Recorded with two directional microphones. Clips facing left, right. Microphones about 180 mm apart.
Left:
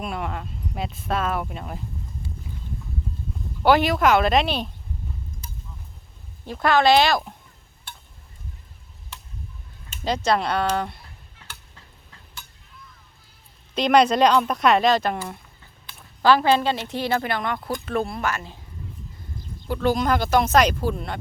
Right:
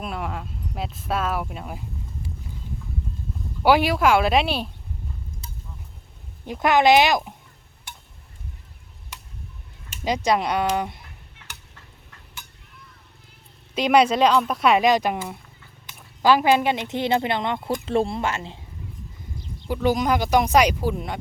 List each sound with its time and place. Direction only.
0.0 s speech: centre (ahead or behind)
3.6 s speech: 10° right (ahead or behind)
6.4 s speech: 15° right (ahead or behind)
10.0 s speech: 15° right (ahead or behind)
13.7 s a woman's voice: 10° right (ahead or behind); by 18.6 s 25° right (ahead or behind)
19.6 s speech: 15° right (ahead or behind)